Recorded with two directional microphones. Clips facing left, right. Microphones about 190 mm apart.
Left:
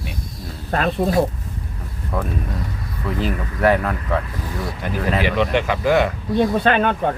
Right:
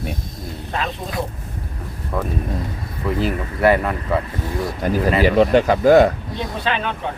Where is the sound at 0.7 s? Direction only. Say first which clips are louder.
Left 8 dB; 45° left (ahead or behind).